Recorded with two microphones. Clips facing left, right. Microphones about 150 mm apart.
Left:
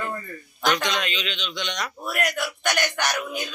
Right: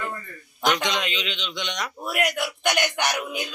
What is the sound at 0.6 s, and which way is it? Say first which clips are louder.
A man's voice: even; 20° right (ahead or behind).